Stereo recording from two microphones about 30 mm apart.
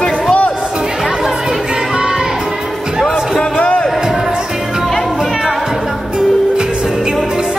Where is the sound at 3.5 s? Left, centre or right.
Left.